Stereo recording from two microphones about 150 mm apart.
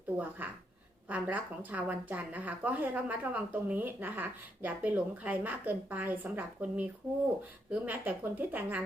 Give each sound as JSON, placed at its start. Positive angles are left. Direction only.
{"t": 0.4, "sound": "speech", "side_deg": -10}